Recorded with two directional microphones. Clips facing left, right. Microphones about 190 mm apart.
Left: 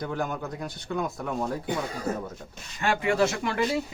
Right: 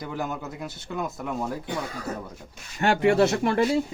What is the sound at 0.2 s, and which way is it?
Speech, 5° right (ahead or behind).